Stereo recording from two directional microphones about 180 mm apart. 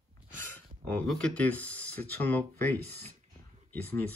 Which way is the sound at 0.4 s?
10° left (ahead or behind).